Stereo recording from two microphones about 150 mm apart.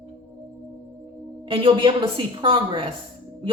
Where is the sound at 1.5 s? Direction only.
35° right (ahead or behind).